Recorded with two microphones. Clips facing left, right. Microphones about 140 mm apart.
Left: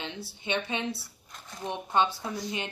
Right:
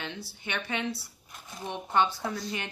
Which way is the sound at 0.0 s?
25° left (ahead or behind).